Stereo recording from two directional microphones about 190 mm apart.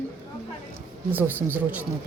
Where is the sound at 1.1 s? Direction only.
10° right (ahead or behind).